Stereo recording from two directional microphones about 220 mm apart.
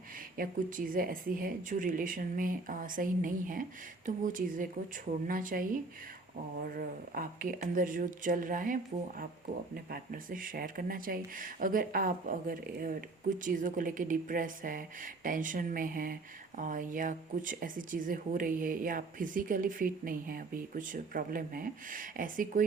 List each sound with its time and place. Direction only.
0.3 s speech: 40° right (ahead or behind)